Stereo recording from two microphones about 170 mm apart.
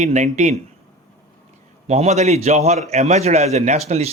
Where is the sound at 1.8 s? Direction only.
40° right (ahead or behind).